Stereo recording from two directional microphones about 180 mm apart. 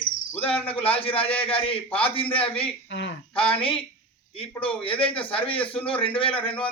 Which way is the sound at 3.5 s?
30° left (ahead or behind).